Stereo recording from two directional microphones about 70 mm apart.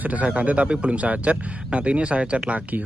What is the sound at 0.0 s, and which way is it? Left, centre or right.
A man's voice, right.